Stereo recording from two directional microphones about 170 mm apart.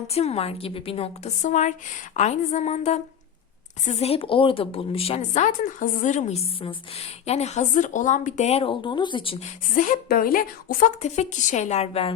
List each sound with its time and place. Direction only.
0.1 s speech: 40° left (ahead or behind)
9.7 s a woman's voice: 50° left (ahead or behind); by 12.1 s 35° left (ahead or behind)